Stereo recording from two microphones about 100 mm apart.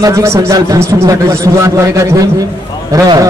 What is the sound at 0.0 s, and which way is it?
A man's voice, 30° right (ahead or behind).